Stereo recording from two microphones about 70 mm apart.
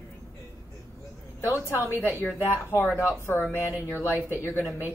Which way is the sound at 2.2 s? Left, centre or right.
Left.